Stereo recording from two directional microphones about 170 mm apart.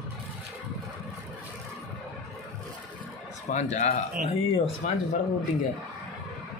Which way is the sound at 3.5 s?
45° left (ahead or behind).